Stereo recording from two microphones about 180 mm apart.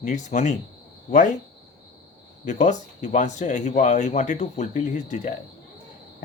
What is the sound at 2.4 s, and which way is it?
Speech, 40° left (ahead or behind).